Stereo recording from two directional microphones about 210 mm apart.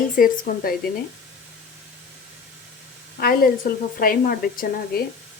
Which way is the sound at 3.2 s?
45° left (ahead or behind).